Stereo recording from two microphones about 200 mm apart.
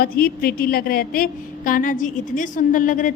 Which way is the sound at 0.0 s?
50° left (ahead or behind).